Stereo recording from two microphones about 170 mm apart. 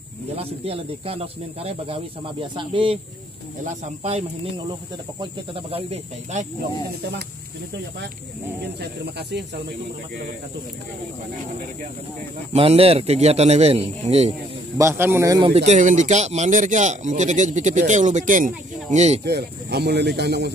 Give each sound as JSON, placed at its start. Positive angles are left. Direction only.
{"t": 0.4, "sound": "speech", "side_deg": -35}
{"t": 3.6, "sound": "speech", "side_deg": -45}
{"t": 12.5, "sound": "speech", "side_deg": -35}
{"t": 14.8, "sound": "speech", "side_deg": -15}
{"t": 15.5, "sound": "speech", "side_deg": -40}
{"t": 19.2, "sound": "speech", "side_deg": -75}